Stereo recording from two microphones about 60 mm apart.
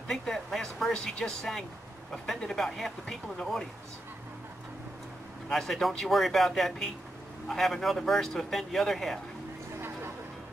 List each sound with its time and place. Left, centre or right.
0.2 s speech: centre
5.5 s speech: centre
9.8 s a sound: right